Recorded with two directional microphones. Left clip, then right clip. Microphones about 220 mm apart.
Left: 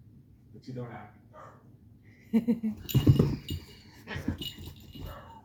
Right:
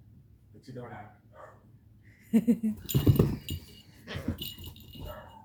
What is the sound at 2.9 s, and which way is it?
Speech, 5° right (ahead or behind).